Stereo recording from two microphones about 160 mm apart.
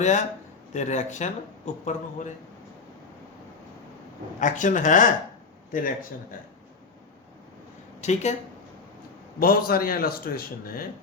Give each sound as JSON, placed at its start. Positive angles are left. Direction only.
{"t": 0.0, "sound": "speech", "side_deg": 45}
{"t": 4.4, "sound": "speech", "side_deg": 50}
{"t": 8.0, "sound": "speech", "side_deg": 45}
{"t": 9.4, "sound": "a man's voice", "side_deg": 65}